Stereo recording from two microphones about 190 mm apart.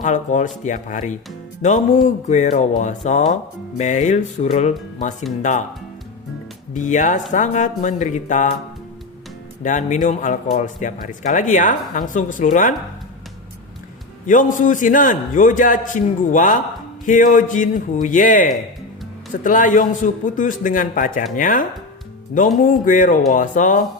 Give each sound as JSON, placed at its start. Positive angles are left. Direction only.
{"t": 0.0, "sound": "speech", "side_deg": 40}
{"t": 6.7, "sound": "speech", "side_deg": 40}
{"t": 9.6, "sound": "speech", "side_deg": 40}
{"t": 14.3, "sound": "a man's voice", "side_deg": 45}